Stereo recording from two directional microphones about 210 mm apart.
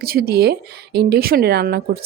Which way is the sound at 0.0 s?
45° right (ahead or behind).